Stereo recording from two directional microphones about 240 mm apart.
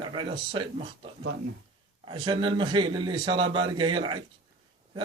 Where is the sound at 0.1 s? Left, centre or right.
Centre.